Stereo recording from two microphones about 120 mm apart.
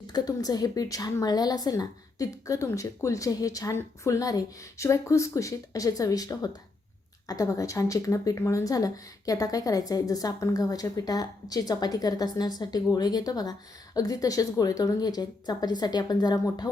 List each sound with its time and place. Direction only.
0.1 s a woman's voice: 35° left (ahead or behind)